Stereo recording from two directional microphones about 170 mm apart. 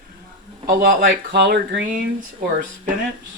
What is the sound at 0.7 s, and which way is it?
Speech, 65° right (ahead or behind).